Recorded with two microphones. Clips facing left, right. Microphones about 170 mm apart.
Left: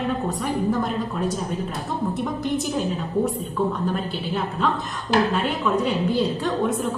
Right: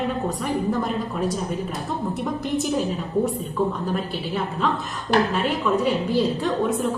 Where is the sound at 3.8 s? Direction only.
Centre (ahead or behind).